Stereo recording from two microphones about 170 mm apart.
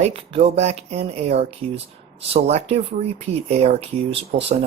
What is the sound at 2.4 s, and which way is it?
Speech, 35° right (ahead or behind).